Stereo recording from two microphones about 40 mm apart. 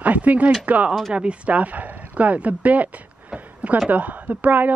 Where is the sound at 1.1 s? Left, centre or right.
Right.